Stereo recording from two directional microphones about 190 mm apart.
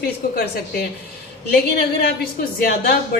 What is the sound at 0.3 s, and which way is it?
A woman's voice, 55° left (ahead or behind).